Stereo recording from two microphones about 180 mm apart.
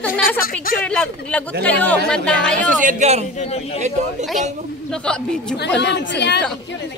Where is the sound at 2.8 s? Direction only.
40° right (ahead or behind).